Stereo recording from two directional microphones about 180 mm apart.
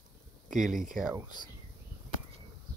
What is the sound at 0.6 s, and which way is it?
Speech, 50° right (ahead or behind).